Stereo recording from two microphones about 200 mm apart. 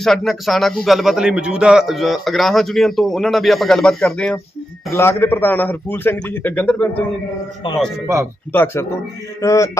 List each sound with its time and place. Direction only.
0.0 s a man's voice: centre (ahead or behind)
8.0 s speech: 15° right (ahead or behind)
8.5 s a man's voice: 10° left (ahead or behind)